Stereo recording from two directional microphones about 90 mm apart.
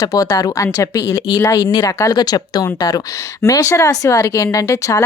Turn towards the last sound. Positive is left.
turn(degrees=40)  # may be behind; listen again after turning